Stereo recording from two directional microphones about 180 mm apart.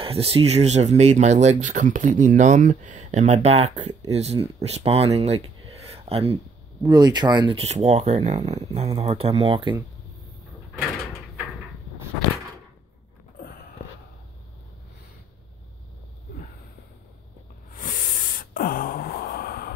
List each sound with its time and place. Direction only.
0.0 s speech: 30° right (ahead or behind)
6.9 s speech: 25° right (ahead or behind)
17.7 s gasp: 50° left (ahead or behind)